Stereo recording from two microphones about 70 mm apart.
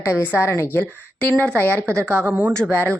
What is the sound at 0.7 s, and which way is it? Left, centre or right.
Speech, left.